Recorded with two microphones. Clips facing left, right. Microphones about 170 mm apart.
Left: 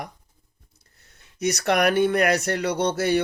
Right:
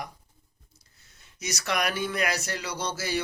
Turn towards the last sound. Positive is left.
turn(degrees=60)  # may be behind; listen again after turning